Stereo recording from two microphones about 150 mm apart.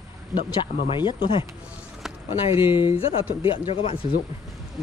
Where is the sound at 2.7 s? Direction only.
35° left (ahead or behind).